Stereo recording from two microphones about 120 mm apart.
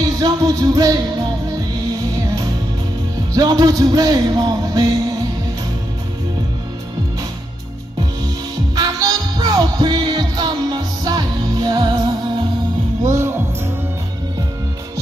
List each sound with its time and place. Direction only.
0.0 s music: 30° right (ahead or behind)
2.2 s music: 30° right (ahead or behind)
8.7 s music: 35° right (ahead or behind)
13.0 s music: 25° right (ahead or behind)